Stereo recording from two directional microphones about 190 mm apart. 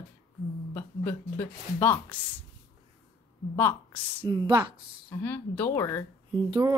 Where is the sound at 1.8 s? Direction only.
10° left (ahead or behind).